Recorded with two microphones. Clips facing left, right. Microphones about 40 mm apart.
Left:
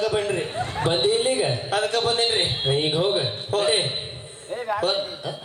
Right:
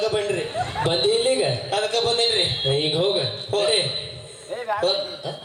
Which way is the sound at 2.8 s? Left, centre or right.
Centre.